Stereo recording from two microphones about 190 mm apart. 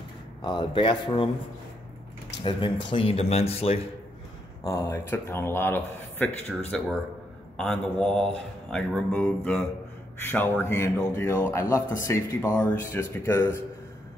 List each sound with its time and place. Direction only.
0.4 s speech: 25° left (ahead or behind)
2.9 s speech: 30° left (ahead or behind)
4.6 s a man's voice: 15° left (ahead or behind)